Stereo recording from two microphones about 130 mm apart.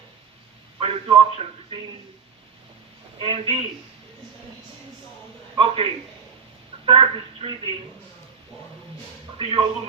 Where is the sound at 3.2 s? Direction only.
45° right (ahead or behind).